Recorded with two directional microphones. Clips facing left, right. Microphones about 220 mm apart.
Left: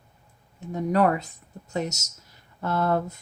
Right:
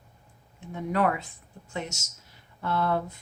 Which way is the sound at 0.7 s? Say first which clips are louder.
Left 4 dB; 40° left (ahead or behind).